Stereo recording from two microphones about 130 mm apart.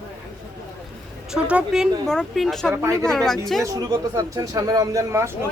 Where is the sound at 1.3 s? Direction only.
5° right (ahead or behind).